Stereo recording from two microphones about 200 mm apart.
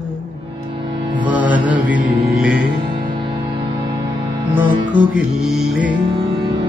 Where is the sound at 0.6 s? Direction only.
25° right (ahead or behind).